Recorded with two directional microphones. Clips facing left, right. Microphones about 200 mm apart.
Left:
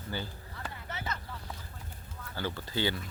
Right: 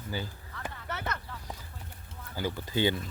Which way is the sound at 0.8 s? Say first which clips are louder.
Right 3 dB; 65° right (ahead or behind).